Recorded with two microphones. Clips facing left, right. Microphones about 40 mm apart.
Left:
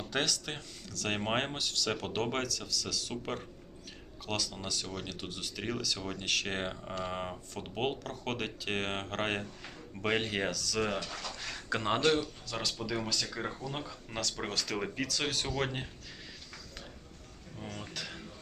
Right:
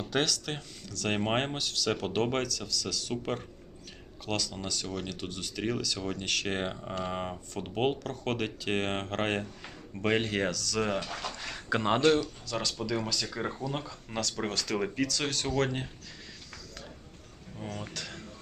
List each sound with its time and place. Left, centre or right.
0.0 s speech: centre
11.1 s speech: right
11.3 s speech: centre
17.6 s speech: centre
17.9 s a sound: centre